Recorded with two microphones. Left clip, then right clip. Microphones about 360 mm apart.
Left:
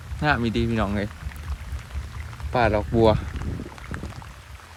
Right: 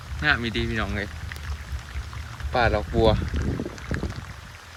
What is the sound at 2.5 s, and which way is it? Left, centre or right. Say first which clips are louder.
Speech: left 1 dB; centre.